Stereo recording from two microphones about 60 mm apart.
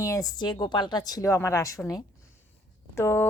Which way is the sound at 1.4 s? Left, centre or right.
Left.